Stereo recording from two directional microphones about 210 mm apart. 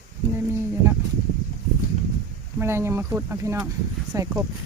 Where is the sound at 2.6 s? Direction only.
10° right (ahead or behind).